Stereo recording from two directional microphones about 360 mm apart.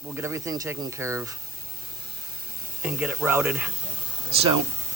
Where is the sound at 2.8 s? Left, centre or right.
Centre.